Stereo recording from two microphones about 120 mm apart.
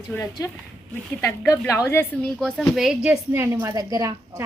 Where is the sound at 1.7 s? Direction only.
20° left (ahead or behind).